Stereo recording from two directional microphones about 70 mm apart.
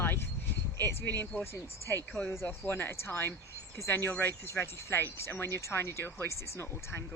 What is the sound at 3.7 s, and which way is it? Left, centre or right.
Speech, left.